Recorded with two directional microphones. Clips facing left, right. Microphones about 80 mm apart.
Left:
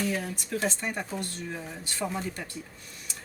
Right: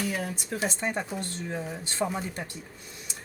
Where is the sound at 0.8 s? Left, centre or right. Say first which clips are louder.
Right 2 dB; right.